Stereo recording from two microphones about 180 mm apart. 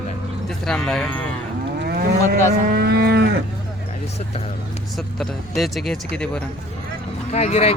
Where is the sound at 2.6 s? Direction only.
60° right (ahead or behind).